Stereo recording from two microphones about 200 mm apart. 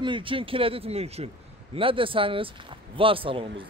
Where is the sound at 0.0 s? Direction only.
25° right (ahead or behind).